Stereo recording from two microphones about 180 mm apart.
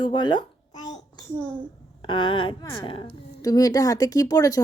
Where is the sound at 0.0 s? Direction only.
25° left (ahead or behind).